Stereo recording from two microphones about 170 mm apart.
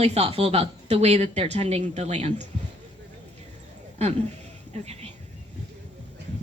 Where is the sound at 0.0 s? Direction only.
35° right (ahead or behind).